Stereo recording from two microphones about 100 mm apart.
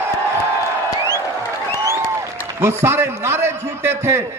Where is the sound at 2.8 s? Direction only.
25° right (ahead or behind).